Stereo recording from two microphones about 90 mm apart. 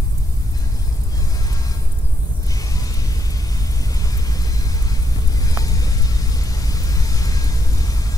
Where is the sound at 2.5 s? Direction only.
40° left (ahead or behind).